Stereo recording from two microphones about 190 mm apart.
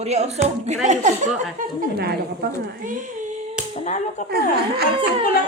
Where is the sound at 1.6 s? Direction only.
55° right (ahead or behind); by 3.4 s 40° right (ahead or behind).